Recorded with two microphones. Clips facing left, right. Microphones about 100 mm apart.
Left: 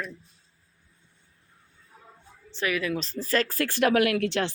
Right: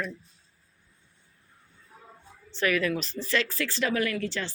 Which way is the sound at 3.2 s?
40° left (ahead or behind).